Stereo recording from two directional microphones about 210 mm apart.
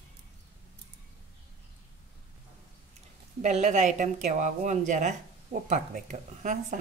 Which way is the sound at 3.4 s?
35° right (ahead or behind).